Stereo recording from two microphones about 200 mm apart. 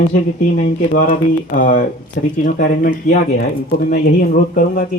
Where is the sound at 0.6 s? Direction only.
40° left (ahead or behind).